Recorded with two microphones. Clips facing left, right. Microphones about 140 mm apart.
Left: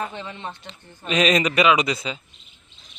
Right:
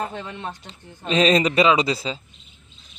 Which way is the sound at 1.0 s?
30° right (ahead or behind).